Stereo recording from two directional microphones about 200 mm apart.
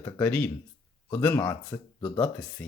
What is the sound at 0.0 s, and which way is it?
Speech, 10° left (ahead or behind).